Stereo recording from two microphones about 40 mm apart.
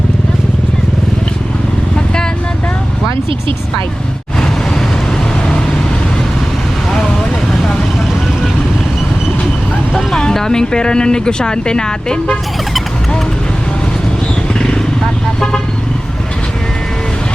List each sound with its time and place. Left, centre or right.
10.2 s speech: centre